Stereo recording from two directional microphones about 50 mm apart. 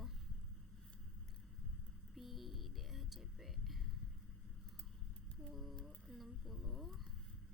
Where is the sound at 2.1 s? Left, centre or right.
Centre.